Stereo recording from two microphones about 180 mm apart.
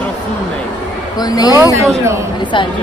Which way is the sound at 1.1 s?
20° left (ahead or behind).